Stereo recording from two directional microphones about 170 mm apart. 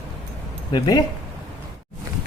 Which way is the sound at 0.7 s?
25° left (ahead or behind).